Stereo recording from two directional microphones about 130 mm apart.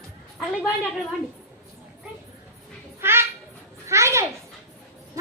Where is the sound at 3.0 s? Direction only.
20° right (ahead or behind).